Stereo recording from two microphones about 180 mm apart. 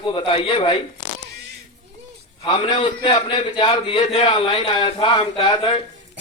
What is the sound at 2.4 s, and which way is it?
A man's voice, 30° left (ahead or behind).